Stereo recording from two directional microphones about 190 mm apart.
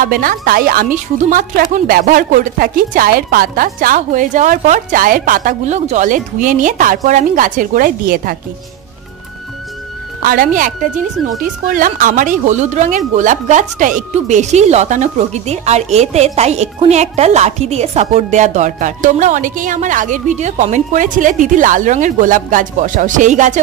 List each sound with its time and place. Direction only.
0.0 s speech: 50° right (ahead or behind)
10.2 s speech: 45° right (ahead or behind)